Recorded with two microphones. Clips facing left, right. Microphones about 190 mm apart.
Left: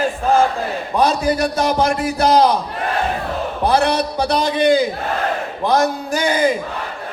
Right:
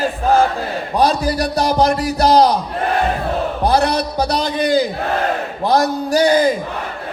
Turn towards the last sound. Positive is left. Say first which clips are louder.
# right 4 dB
turn(degrees=-35)  # may be behind; listen again after turning